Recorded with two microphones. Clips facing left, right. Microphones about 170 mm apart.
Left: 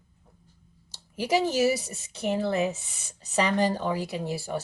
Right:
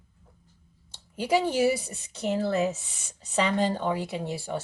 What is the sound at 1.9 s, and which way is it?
Speech, 20° left (ahead or behind).